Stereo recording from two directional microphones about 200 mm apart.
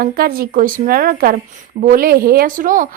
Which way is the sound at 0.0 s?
50° right (ahead or behind).